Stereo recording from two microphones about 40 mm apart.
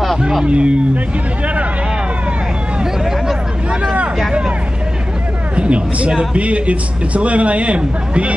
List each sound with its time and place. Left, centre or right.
0.5 s a man's voice: right
2.8 s hubbub: centre
5.6 s a man's voice: right